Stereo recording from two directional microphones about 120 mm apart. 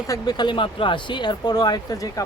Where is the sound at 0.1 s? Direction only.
35° left (ahead or behind).